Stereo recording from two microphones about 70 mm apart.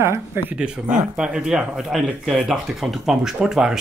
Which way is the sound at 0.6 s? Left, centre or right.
Centre.